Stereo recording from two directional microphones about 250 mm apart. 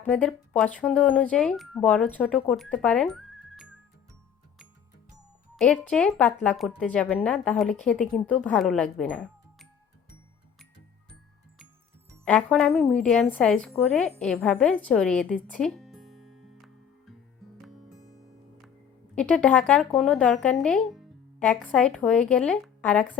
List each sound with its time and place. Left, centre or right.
0.0 s speech: centre
5.5 s speech: centre
11.1 s music: centre
12.2 s speech: centre
15.6 s music: centre
19.1 s speech: centre